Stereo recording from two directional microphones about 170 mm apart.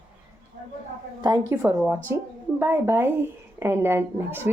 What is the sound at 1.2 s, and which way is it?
A woman's voice, 20° right (ahead or behind).